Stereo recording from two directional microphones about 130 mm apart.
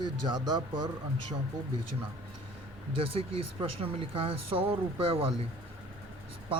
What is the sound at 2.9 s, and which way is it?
Speech, 45° right (ahead or behind).